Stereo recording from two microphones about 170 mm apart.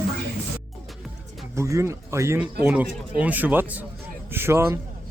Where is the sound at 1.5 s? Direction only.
15° right (ahead or behind).